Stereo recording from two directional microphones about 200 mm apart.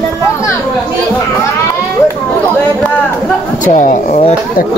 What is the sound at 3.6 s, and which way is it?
Speech, 40° left (ahead or behind).